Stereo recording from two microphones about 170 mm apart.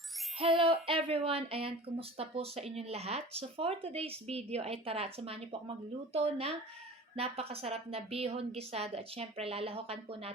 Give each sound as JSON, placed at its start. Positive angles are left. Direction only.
{"t": 0.3, "sound": "speech", "side_deg": -30}